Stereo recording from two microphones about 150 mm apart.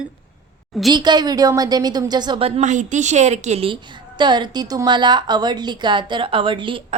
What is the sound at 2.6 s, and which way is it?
A woman's voice, 55° right (ahead or behind).